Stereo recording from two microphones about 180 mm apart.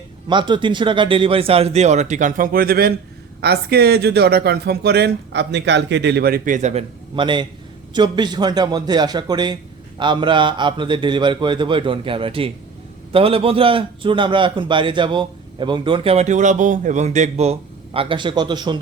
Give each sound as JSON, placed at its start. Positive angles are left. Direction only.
{"t": 0.3, "sound": "speech", "side_deg": -25}
{"t": 7.2, "sound": "a man's voice", "side_deg": -25}